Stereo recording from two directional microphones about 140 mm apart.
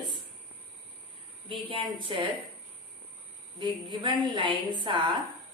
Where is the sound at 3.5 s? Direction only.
35° right (ahead or behind).